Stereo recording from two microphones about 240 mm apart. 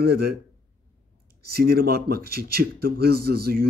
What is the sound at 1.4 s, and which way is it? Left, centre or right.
A man's voice, right.